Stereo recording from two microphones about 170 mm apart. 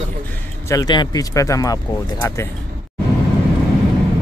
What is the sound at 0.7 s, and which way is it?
Speech, 25° left (ahead or behind).